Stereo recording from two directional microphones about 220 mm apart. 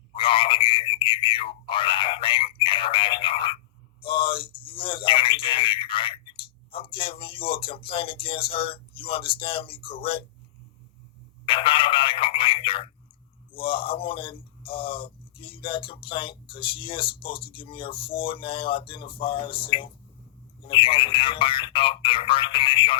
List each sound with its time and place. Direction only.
0.2 s a sound: 25° left (ahead or behind)
6.7 s speech: 25° left (ahead or behind)
11.4 s telephone: 25° left (ahead or behind)
13.5 s speech: 25° left (ahead or behind)